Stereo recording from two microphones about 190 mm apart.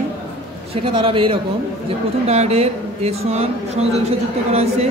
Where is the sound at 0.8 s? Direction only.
25° right (ahead or behind).